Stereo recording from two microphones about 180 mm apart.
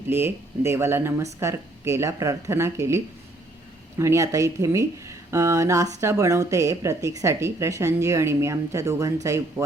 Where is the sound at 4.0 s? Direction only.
15° right (ahead or behind).